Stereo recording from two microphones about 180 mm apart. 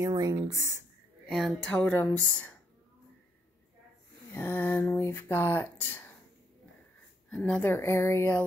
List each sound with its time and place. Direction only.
0.0 s speech: 20° right (ahead or behind)
1.3 s speech: centre (ahead or behind)
4.3 s speech: 10° left (ahead or behind)
7.2 s speech: 5° left (ahead or behind)